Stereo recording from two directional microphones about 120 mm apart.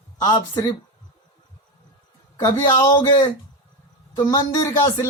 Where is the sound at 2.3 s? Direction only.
30° left (ahead or behind).